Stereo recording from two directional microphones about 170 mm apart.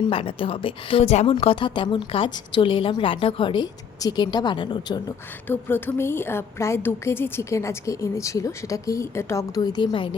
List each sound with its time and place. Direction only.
0.1 s a woman's voice: 30° left (ahead or behind)
5.5 s a woman's voice: 10° left (ahead or behind); by 10.2 s 30° left (ahead or behind)